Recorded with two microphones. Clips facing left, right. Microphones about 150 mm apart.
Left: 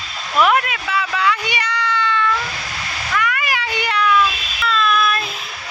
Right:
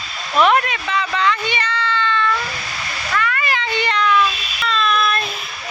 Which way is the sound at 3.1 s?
10° left (ahead or behind).